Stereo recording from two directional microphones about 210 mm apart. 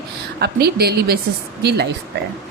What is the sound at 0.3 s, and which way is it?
Speech, 50° right (ahead or behind).